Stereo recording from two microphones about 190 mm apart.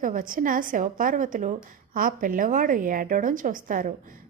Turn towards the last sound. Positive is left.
turn(degrees=-45)  # may be behind; listen again after turning